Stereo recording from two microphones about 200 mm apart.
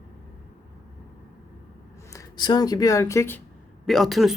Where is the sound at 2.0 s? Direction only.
15° left (ahead or behind).